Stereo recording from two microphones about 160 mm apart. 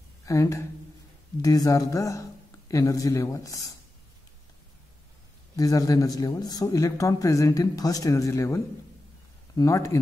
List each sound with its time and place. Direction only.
0.2 s a man's voice: 20° left (ahead or behind)
5.6 s a man's voice: 20° left (ahead or behind)